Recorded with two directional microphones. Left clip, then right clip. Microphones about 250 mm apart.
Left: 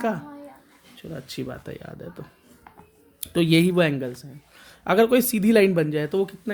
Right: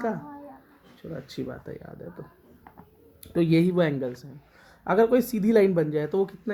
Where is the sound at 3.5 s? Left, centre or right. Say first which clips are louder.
Left 4 dB; left.